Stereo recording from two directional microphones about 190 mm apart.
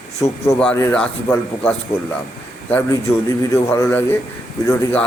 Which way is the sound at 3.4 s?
15° left (ahead or behind).